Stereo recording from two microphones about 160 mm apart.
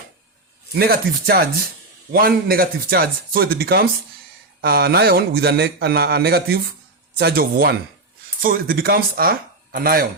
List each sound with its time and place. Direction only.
0.7 s a man's voice: 75° right (ahead or behind)